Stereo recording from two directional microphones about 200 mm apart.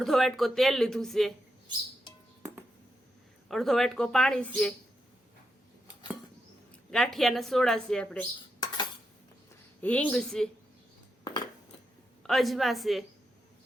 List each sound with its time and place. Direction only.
0.0 s a woman's voice: centre (ahead or behind)
3.5 s a woman's voice: centre (ahead or behind)
6.9 s a woman's voice: centre (ahead or behind)
9.8 s a woman's voice: 5° left (ahead or behind)
11.2 s a sound: 20° left (ahead or behind)
12.2 s a woman's voice: centre (ahead or behind)